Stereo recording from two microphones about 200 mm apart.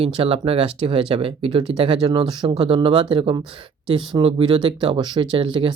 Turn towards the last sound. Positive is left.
turn(degrees=-25)  # may be behind; listen again after turning